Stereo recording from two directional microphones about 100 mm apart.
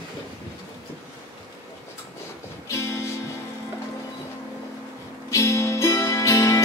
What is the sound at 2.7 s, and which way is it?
Music, 25° left (ahead or behind).